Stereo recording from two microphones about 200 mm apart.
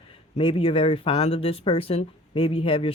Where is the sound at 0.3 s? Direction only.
25° left (ahead or behind).